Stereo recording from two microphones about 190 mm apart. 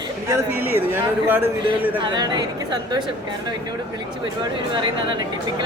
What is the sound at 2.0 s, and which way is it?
Speech, 25° right (ahead or behind).